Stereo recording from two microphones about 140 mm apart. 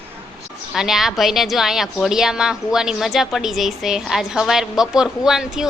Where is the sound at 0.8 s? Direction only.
Centre (ahead or behind).